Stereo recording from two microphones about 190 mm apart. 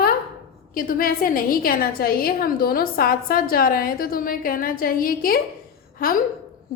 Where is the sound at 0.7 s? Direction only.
50° left (ahead or behind).